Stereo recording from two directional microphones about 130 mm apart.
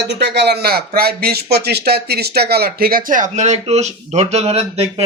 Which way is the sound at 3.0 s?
90° right.